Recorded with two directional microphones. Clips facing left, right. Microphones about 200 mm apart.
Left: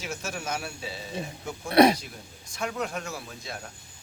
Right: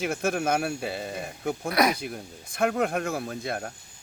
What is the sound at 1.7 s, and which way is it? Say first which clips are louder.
Speech: left 6 dB; 30° left (ahead or behind).